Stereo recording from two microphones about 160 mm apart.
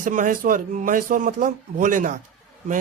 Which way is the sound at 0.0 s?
55° right (ahead or behind).